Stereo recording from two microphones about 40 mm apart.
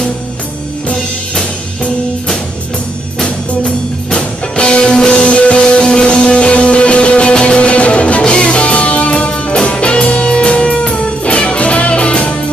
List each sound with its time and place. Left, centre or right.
3.2 s music: left